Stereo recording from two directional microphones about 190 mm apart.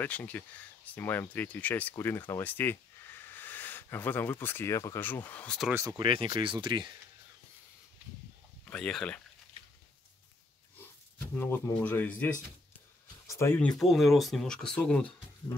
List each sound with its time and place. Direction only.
0.0 s speech: 10° left (ahead or behind)
5.7 s speech: 15° right (ahead or behind)
8.6 s speech: 5° left (ahead or behind)
11.3 s speech: 10° left (ahead or behind)
13.4 s speech: 10° left (ahead or behind)